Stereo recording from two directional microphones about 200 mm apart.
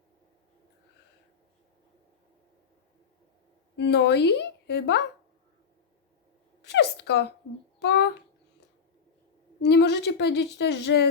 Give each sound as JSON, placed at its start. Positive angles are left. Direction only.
{"t": 3.8, "sound": "a woman's voice", "side_deg": 60}
{"t": 6.7, "sound": "a sound", "side_deg": 55}
{"t": 7.8, "sound": "speech", "side_deg": 55}
{"t": 9.6, "sound": "a woman's voice", "side_deg": 55}